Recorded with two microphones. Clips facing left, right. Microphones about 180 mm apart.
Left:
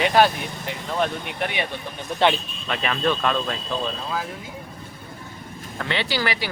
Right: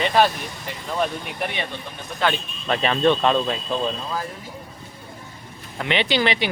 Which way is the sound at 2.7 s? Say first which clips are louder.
Right 5 dB; 30° right (ahead or behind).